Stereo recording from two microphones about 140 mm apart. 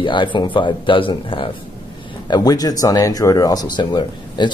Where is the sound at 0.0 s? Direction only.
35° left (ahead or behind).